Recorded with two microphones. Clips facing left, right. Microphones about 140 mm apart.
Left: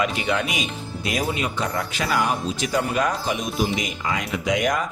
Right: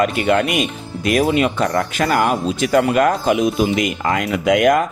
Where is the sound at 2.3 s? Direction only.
70° right (ahead or behind).